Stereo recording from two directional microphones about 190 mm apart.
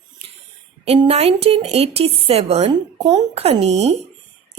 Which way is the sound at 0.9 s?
30° right (ahead or behind).